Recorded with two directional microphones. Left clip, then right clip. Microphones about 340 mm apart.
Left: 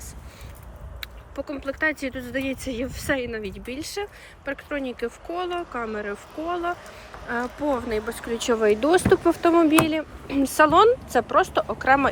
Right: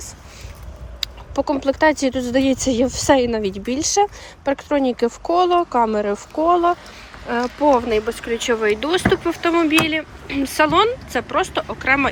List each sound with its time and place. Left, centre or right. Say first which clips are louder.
1.0 s speech: right 12 dB; centre